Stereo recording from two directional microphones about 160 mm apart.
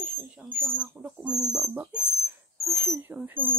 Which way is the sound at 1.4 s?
20° right (ahead or behind).